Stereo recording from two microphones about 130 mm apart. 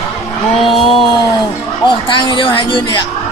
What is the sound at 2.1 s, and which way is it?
Speech, 40° left (ahead or behind).